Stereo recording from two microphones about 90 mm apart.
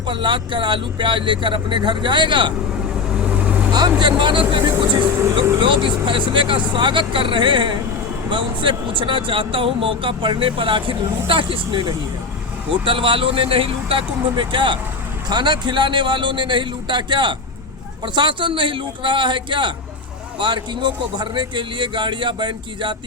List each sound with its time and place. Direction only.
0.1 s a man's voice: 60° right (ahead or behind)
3.2 s vehicle: 15° right (ahead or behind)
3.7 s vehicle: 55° right (ahead or behind)
4.0 s a man's voice: 65° right (ahead or behind)
12.8 s speech: 70° right (ahead or behind)
15.3 s a man's voice: 55° right (ahead or behind)